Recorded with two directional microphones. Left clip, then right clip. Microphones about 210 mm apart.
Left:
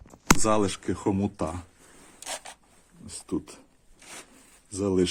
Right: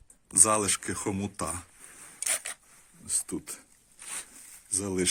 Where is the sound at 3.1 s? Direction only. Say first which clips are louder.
Left 1 dB; centre (ahead or behind).